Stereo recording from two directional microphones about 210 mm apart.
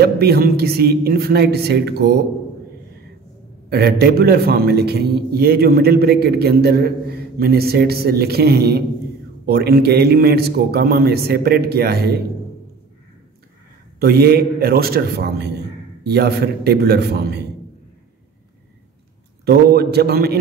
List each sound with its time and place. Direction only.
0.0 s a man's voice: 50° right (ahead or behind)
3.7 s a man's voice: 50° right (ahead or behind)
13.9 s a man's voice: 50° right (ahead or behind)
19.4 s a man's voice: 50° right (ahead or behind)